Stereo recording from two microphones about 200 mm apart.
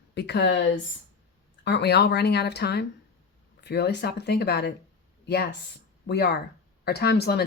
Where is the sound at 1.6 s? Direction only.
55° left (ahead or behind).